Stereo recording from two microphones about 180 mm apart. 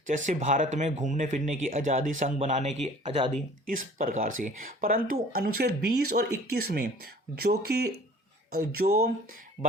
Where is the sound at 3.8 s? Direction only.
50° right (ahead or behind).